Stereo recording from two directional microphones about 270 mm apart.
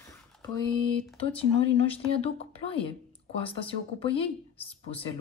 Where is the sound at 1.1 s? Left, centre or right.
Left.